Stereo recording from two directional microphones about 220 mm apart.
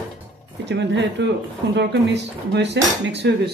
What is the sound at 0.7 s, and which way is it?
Speech, 50° right (ahead or behind).